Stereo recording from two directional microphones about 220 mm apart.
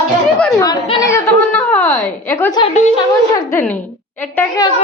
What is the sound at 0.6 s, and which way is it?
Speech, 20° left (ahead or behind).